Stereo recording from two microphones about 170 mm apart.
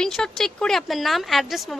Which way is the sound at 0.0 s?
5° left (ahead or behind).